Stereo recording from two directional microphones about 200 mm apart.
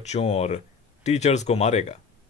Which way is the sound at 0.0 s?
30° left (ahead or behind).